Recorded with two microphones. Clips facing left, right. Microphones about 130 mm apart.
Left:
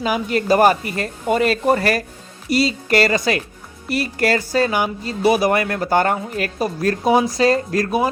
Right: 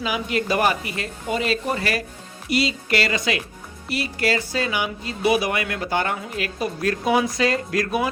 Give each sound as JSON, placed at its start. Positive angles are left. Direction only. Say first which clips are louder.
{"t": 0.0, "sound": "speech", "louder": "left 4 dB", "side_deg": 45}